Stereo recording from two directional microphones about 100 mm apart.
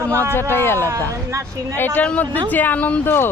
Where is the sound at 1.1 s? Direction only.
30° right (ahead or behind).